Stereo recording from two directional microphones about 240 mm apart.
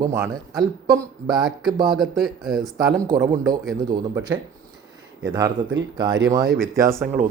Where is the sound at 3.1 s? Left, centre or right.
Centre.